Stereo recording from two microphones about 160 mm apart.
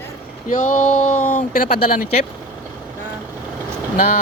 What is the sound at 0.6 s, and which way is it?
Speech, 55° left (ahead or behind).